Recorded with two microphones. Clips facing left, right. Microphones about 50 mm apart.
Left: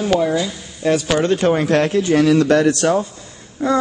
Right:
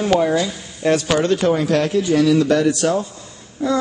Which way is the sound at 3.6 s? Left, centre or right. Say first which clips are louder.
Left 2 dB; left.